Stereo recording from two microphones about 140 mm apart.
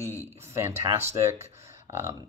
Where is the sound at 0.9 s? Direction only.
20° right (ahead or behind).